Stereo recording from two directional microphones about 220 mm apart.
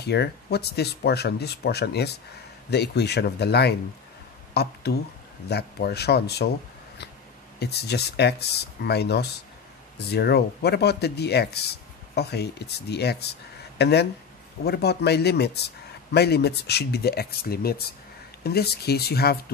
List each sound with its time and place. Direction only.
0.0 s speech: 50° left (ahead or behind)
7.5 s speech: 50° left (ahead or behind)